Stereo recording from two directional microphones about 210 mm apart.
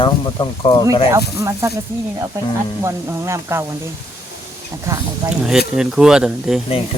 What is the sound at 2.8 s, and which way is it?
Speech, 15° right (ahead or behind).